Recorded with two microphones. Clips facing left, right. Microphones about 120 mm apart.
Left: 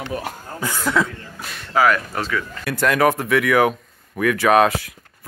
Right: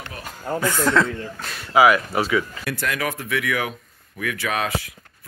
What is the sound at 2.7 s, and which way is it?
Speech, 45° left (ahead or behind).